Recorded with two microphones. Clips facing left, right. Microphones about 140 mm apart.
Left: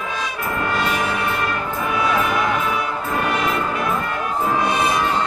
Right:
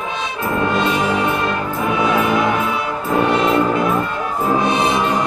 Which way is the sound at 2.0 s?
25° right (ahead or behind).